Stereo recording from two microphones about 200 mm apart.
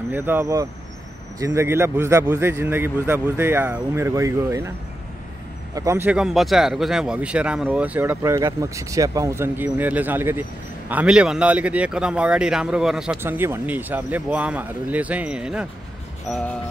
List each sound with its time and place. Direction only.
0.1 s speech: 10° right (ahead or behind)
5.8 s speech: 15° right (ahead or behind); by 16.5 s 5° left (ahead or behind)